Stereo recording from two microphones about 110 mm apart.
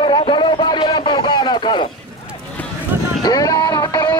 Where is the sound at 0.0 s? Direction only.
50° left (ahead or behind).